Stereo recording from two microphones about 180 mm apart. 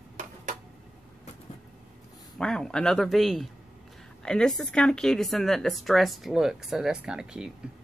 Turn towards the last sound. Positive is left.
turn(degrees=-5)  # may be behind; listen again after turning